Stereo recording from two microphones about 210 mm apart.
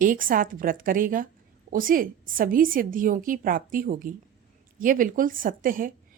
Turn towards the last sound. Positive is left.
turn(degrees=-40)  # may be behind; listen again after turning